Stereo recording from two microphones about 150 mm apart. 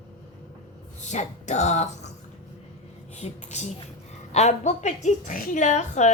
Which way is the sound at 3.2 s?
50° left (ahead or behind).